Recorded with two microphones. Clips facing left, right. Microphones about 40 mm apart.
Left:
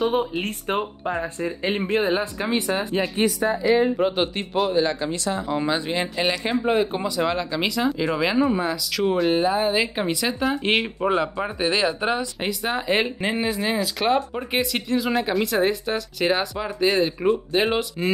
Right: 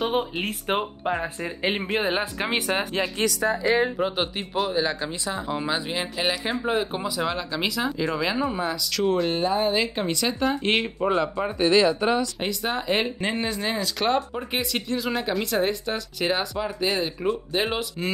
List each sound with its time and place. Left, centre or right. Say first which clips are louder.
0.0 s speech: left 3 dB; centre
2.8 s speech: left 3 dB; right
3.9 s speech: left 4 dB; centre
5.1 s speech: left 4 dB; centre
5.6 s speech: left 3 dB; centre
11.0 s speech: left 1 dB; left
11.4 s speech: right 3 dB; centre